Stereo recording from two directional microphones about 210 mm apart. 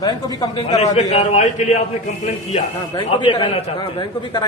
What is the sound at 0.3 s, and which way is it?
Speech, 20° left (ahead or behind).